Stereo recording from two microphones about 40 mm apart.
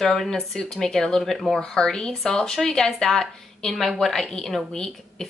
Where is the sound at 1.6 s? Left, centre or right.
Centre.